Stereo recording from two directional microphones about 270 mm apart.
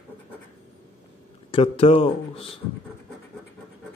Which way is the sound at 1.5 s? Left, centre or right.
Left.